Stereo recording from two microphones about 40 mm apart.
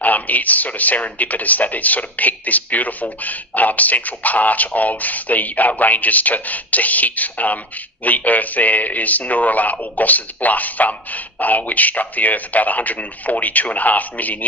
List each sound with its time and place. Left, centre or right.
0.0 s speech: left